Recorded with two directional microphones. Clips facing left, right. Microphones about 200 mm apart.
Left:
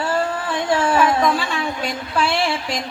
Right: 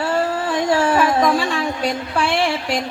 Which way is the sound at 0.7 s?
40° right (ahead or behind).